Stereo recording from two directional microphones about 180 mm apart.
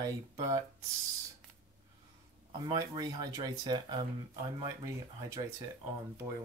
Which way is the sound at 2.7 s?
20° right (ahead or behind).